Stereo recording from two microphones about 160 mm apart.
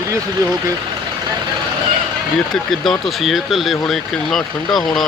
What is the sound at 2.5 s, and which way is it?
Speech, centre (ahead or behind).